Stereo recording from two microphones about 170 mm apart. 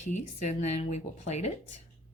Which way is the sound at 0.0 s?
45° left (ahead or behind).